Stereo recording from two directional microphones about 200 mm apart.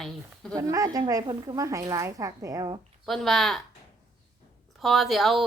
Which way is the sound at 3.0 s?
Centre (ahead or behind).